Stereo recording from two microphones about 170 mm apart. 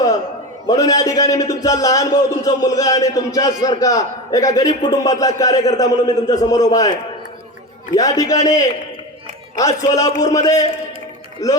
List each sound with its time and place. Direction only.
0.7 s a man's voice: 20° left (ahead or behind)
7.9 s a man's voice: 20° left (ahead or behind)
9.6 s a man's voice: 20° left (ahead or behind)